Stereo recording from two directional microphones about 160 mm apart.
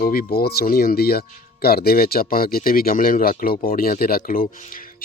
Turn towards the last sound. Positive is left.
turn(degrees=55)  # may be behind; listen again after turning